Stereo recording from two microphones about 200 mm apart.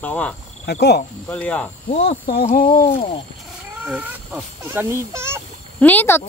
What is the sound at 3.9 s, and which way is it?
Speech, 5° right (ahead or behind).